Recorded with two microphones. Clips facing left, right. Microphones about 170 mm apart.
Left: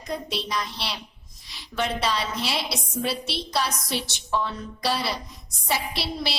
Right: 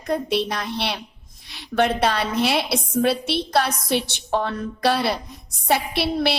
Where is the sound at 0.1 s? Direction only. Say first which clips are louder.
Right 7 dB; 60° right (ahead or behind).